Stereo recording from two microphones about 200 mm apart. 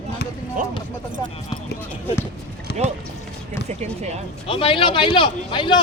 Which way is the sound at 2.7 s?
55° left (ahead or behind).